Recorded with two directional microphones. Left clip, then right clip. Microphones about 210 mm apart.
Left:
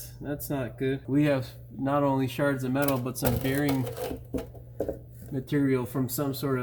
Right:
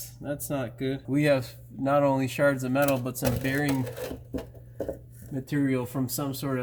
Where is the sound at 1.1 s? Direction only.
45° right (ahead or behind).